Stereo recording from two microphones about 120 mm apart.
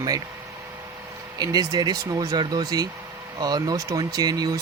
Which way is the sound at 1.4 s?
35° right (ahead or behind).